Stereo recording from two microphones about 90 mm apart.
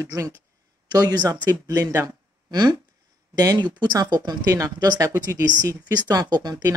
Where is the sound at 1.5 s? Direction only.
30° right (ahead or behind).